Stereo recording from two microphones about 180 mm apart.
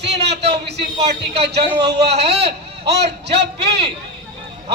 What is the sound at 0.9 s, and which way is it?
Speech, 35° right (ahead or behind).